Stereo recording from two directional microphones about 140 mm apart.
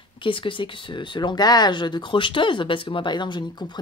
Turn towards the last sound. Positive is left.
turn(degrees=30)  # may be behind; listen again after turning